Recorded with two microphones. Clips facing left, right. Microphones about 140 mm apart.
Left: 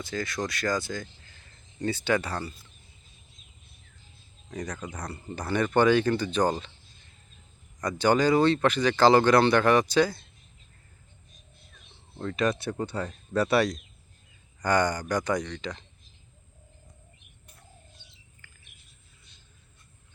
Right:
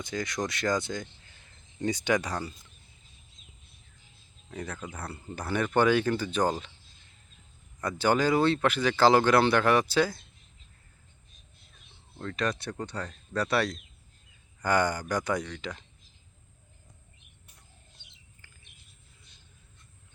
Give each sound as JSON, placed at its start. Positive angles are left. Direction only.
{"t": 0.0, "sound": "speech", "side_deg": -20}
{"t": 4.4, "sound": "speech", "side_deg": -5}
{"t": 7.8, "sound": "speech", "side_deg": -5}
{"t": 12.2, "sound": "speech", "side_deg": 5}
{"t": 14.6, "sound": "speech", "side_deg": -10}
{"t": 18.4, "sound": "bird vocalization", "side_deg": -30}